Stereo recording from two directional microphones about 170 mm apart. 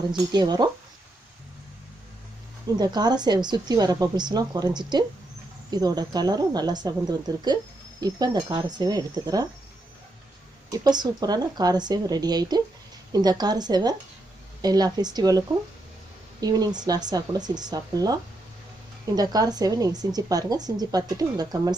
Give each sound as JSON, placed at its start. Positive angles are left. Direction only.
{"t": 0.1, "sound": "speech", "side_deg": -25}
{"t": 2.7, "sound": "speech", "side_deg": -25}
{"t": 10.7, "sound": "speech", "side_deg": -25}